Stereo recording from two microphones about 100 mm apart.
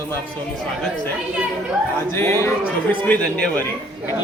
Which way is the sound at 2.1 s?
25° left (ahead or behind).